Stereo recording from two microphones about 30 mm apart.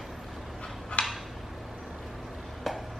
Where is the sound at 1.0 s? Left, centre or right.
Left.